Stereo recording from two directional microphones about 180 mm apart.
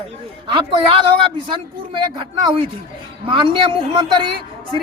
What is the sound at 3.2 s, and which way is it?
A woman's voice, 30° right (ahead or behind).